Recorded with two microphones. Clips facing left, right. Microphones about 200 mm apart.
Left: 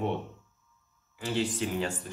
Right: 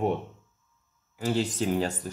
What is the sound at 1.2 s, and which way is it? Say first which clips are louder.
Speech: right 3 dB; 40° right (ahead or behind).